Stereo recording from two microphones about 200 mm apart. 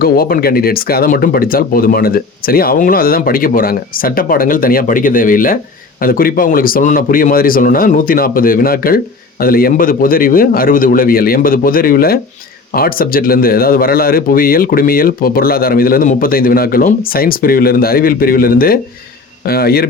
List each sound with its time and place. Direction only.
0.0 s speech: 45° left (ahead or behind)